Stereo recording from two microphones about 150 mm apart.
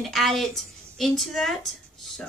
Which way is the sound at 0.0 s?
Centre (ahead or behind).